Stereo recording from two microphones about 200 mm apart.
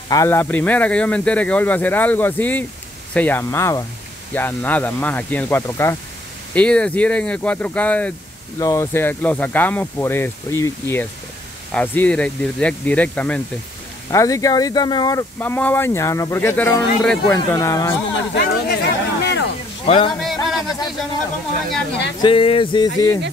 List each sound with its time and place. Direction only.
0.1 s speech: 15° left (ahead or behind)
18.3 s speech: 55° left (ahead or behind)
19.9 s speech: 25° left (ahead or behind)
20.4 s a sound: centre (ahead or behind)
22.2 s speech: 25° left (ahead or behind)